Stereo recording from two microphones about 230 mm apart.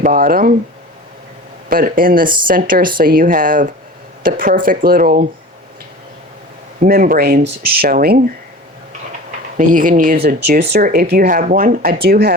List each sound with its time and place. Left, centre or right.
0.0 s speech: right
1.7 s speech: right
6.7 s speech: right
9.6 s speech: right